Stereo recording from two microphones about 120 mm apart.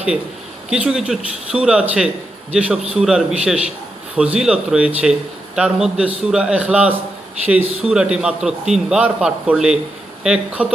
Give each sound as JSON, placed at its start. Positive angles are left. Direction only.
{"t": 0.7, "sound": "a man's voice", "side_deg": -5}